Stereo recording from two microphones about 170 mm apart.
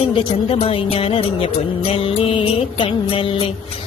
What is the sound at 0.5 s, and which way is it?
Speech, 35° left (ahead or behind).